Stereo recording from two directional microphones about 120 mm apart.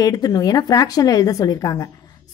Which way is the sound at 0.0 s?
30° left (ahead or behind).